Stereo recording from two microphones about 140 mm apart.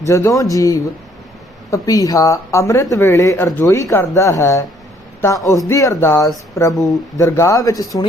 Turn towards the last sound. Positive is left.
turn(degrees=25)  # may be behind; listen again after turning